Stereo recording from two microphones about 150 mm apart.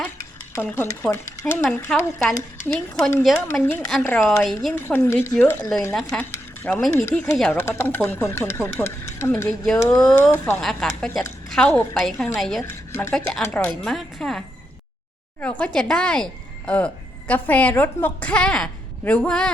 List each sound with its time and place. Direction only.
0.2 s a woman's voice: 15° left (ahead or behind)
6.6 s cutlery: 15° left (ahead or behind)
6.9 s a woman's voice: 10° left (ahead or behind)
10.3 s speech: 15° left (ahead or behind)
10.6 s a woman's voice: centre (ahead or behind)
12.6 s a woman's voice: 15° left (ahead or behind)